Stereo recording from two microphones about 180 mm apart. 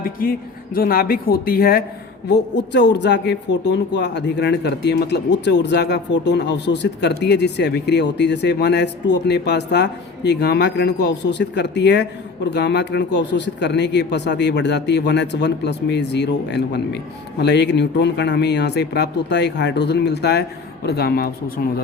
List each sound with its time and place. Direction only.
0.0 s speech: 55° left (ahead or behind)
2.3 s speech: 70° left (ahead or behind)